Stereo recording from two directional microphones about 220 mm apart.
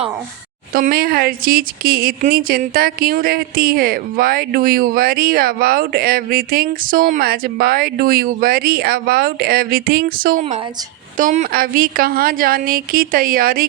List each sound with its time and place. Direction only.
0.7 s speech: 40° right (ahead or behind)